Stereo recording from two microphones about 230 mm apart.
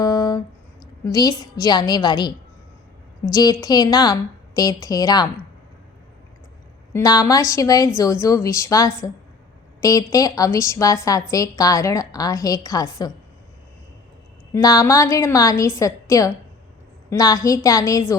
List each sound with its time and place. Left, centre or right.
0.0 s a sound: centre
1.0 s a woman's voice: centre
3.3 s a woman's voice: centre
6.9 s a woman's voice: centre
14.5 s a woman's voice: centre